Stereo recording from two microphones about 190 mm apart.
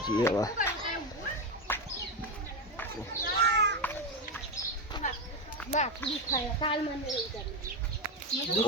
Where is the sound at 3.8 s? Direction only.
10° left (ahead or behind).